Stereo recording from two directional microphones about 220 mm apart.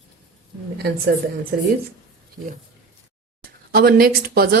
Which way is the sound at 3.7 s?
45° right (ahead or behind).